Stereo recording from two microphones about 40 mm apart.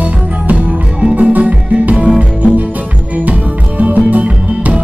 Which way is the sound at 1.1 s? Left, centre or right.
Right.